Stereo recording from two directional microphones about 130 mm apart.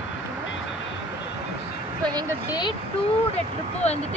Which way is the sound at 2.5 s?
35° left (ahead or behind).